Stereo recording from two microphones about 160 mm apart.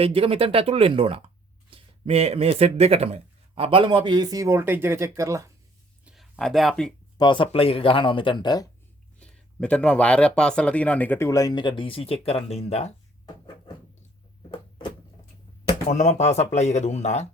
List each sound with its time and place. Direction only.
0.0 s speech: 35° right (ahead or behind); by 5.5 s 20° right (ahead or behind)
6.3 s speech: centre (ahead or behind)
7.2 s speech: 30° left (ahead or behind)
9.1 s speech: 5° left (ahead or behind); by 12.9 s 40° left (ahead or behind)
14.5 s a sound: 30° left (ahead or behind)
15.9 s speech: 45° left (ahead or behind)